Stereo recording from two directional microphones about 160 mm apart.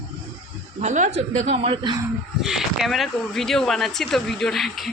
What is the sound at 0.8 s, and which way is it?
A woman's voice, 50° right (ahead or behind).